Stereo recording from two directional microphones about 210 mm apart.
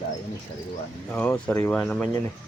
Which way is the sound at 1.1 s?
5° left (ahead or behind).